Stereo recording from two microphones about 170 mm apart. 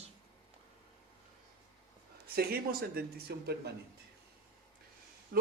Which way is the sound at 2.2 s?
65° right (ahead or behind).